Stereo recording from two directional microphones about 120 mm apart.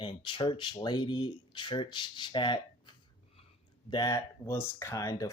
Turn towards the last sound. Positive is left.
turn(degrees=25)  # may be behind; listen again after turning